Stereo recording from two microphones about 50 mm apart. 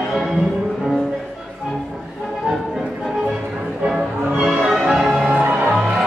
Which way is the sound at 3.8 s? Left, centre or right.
Centre.